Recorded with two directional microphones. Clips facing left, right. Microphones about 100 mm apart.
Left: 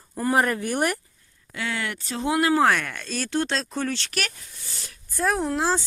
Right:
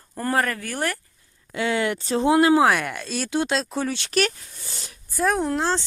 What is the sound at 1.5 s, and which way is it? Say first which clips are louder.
Speech: right 7 dB; 20° right (ahead or behind).